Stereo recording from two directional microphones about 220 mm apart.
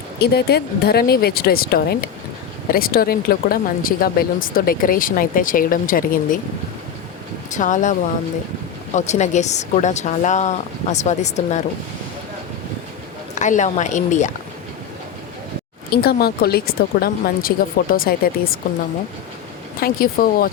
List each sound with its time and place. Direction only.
0.2 s speech: 45° left (ahead or behind)
7.5 s speech: 35° left (ahead or behind)
9.0 s speech: 30° left (ahead or behind)
13.3 s speech: 35° left (ahead or behind)
16.0 s speech: 45° left (ahead or behind)
19.8 s speech: 40° left (ahead or behind)